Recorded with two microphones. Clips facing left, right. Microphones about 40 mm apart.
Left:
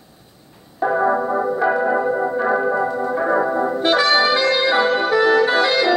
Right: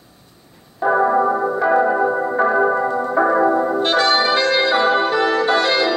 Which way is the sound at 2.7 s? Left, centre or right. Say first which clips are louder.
Right 2 dB; centre.